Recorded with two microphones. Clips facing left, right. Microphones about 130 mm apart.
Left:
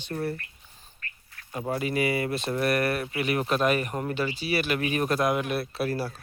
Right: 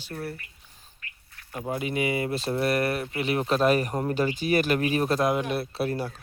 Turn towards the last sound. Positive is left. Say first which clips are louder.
# even
turn(degrees=-20)  # may be behind; listen again after turning